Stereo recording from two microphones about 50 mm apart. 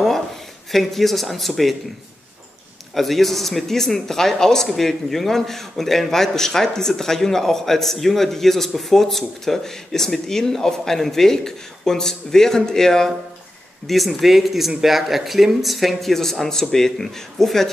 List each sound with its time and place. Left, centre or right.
0.7 s speech: centre
2.9 s speech: centre